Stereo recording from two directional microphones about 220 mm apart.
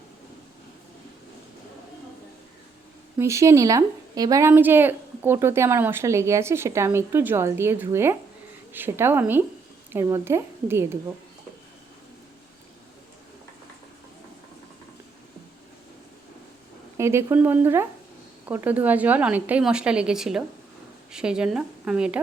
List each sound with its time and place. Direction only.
3.2 s a woman's voice: 15° right (ahead or behind)
17.0 s a woman's voice: 10° right (ahead or behind)